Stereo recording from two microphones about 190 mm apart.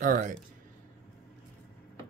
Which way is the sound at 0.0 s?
45° right (ahead or behind).